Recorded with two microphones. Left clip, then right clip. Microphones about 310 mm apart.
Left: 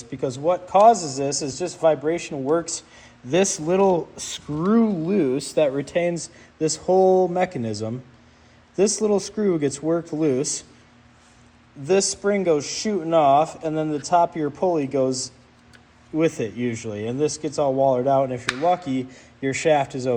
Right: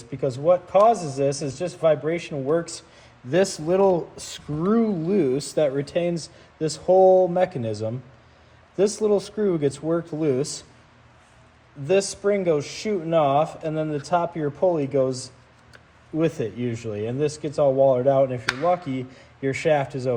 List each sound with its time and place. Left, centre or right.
0.2 s speech: centre
11.9 s speech: left
16.1 s speech: left